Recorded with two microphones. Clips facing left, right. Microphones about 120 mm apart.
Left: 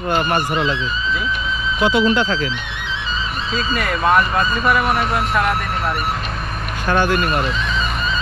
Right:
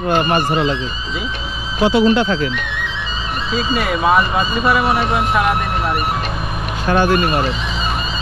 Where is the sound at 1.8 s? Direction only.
35° right (ahead or behind).